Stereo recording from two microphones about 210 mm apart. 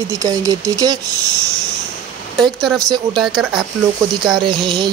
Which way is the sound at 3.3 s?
Centre (ahead or behind).